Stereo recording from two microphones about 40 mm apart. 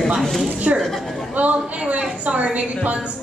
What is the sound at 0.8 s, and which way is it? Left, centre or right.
Speech, centre.